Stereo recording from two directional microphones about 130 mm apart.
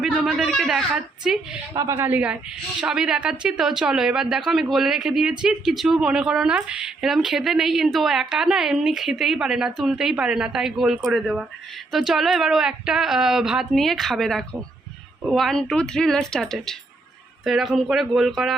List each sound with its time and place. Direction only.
0.0 s speech: centre (ahead or behind)
1.7 s a woman's voice: 25° right (ahead or behind); by 18.5 s centre (ahead or behind)